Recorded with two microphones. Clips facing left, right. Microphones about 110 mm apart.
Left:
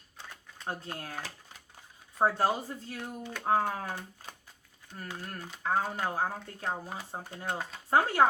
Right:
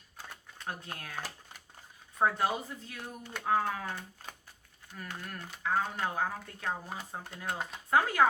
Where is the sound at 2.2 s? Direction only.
35° left (ahead or behind).